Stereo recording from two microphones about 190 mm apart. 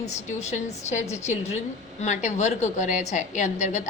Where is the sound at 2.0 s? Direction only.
40° left (ahead or behind).